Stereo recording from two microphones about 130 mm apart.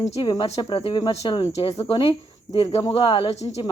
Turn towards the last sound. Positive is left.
turn(degrees=35)  # may be behind; listen again after turning